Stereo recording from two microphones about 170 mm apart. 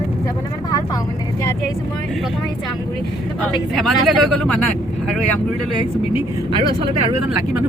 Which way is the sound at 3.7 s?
Centre (ahead or behind).